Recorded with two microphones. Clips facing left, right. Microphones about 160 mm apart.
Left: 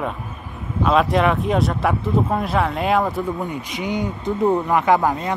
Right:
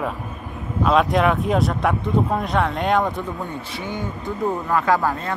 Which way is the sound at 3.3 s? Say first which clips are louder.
Left 3 dB; 15° left (ahead or behind).